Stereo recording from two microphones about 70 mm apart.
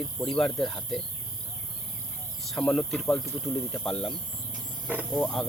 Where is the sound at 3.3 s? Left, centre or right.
Centre.